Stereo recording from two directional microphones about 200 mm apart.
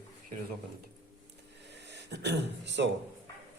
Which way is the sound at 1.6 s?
60° right (ahead or behind).